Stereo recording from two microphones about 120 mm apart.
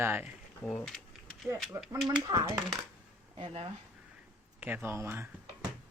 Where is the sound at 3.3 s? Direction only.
55° right (ahead or behind).